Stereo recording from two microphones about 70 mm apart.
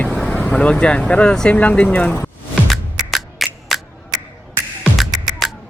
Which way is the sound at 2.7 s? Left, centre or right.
Centre.